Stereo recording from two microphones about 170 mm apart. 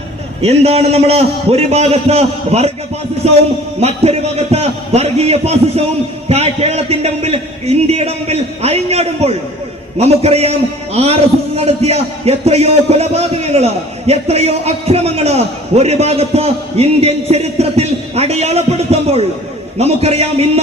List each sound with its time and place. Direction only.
0.4 s a man's voice: 35° right (ahead or behind)